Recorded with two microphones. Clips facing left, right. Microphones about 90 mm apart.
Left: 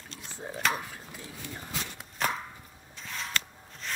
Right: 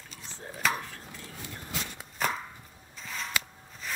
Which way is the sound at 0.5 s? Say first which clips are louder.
Even; centre (ahead or behind).